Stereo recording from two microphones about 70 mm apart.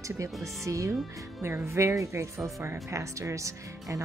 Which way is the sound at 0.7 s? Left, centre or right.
Right.